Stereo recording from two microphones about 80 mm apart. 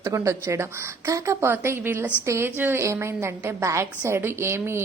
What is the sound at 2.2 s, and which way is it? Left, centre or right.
Speech, right.